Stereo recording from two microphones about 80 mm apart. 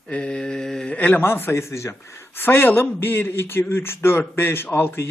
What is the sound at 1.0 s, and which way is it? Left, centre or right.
A man's voice, left.